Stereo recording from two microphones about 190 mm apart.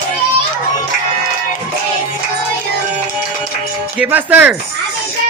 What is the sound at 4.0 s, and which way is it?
Speech, 10° right (ahead or behind).